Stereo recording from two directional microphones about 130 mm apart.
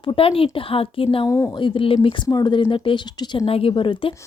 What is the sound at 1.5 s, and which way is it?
A woman's voice, 40° left (ahead or behind).